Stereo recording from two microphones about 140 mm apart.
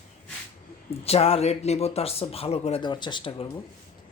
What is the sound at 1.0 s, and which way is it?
Speech, 45° left (ahead or behind).